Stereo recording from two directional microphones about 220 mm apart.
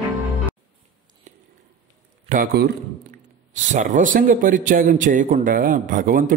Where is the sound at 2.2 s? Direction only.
40° right (ahead or behind).